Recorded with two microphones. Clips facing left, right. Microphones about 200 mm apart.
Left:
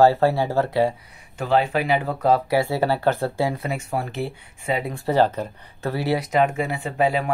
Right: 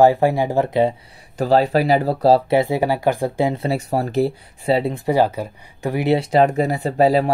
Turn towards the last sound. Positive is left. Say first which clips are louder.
# right 6 dB
turn(degrees=-35)  # may be behind; listen again after turning